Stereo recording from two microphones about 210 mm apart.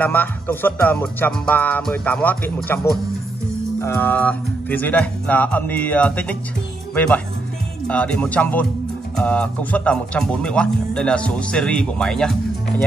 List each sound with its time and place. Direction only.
0.0 s speech: 10° left (ahead or behind)
7.9 s speech: 5° left (ahead or behind)